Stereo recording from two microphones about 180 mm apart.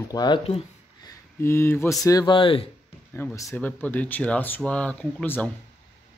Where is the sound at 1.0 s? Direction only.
15° left (ahead or behind).